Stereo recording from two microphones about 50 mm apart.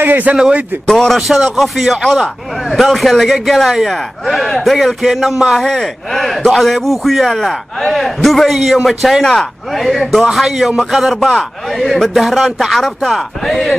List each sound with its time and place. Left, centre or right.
0.0 s a man's voice: right
0.8 s speech: centre
1.1 s a man's voice: centre
9.2 s a man's voice: centre